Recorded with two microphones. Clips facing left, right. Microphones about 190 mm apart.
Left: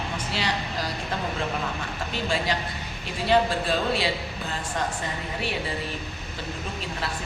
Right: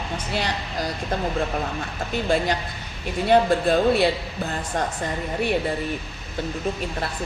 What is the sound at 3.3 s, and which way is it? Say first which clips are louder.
Speech: right 5 dB; 55° right (ahead or behind).